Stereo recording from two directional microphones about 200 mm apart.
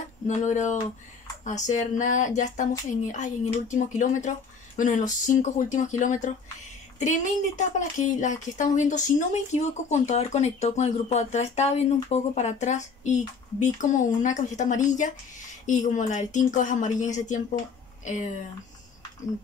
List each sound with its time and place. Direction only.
0.3 s speech: 40° left (ahead or behind)